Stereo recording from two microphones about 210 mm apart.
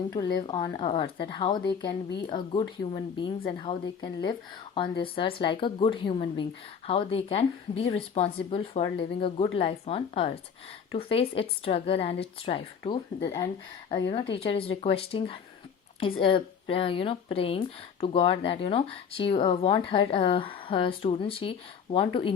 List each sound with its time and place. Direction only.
0.1 s speech: 20° left (ahead or behind)